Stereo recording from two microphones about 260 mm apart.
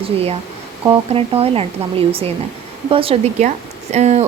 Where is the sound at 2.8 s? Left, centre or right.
Right.